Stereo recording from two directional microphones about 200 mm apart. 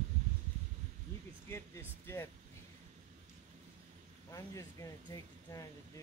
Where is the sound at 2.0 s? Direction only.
10° left (ahead or behind).